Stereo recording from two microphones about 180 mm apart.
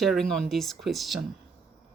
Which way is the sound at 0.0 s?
Centre (ahead or behind).